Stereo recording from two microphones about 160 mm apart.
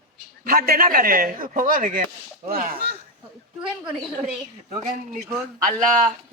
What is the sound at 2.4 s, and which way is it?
Speech, 70° right (ahead or behind).